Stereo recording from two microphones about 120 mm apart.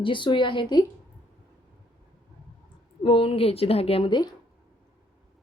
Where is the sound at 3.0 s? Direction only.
50° left (ahead or behind).